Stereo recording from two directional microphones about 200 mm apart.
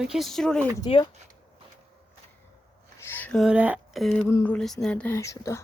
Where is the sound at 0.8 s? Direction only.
25° left (ahead or behind).